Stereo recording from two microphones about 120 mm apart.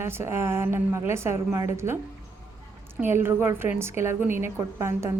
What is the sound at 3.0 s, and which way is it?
A woman's voice, 20° right (ahead or behind).